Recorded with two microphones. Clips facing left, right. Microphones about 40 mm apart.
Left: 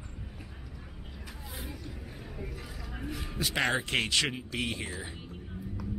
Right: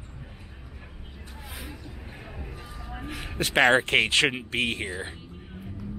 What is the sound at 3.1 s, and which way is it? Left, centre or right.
Speech, right.